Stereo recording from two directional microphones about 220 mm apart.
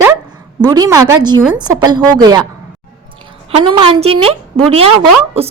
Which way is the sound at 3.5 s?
25° right (ahead or behind).